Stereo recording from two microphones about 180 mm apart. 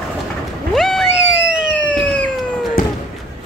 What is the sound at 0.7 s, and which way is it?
Vehicle, centre (ahead or behind).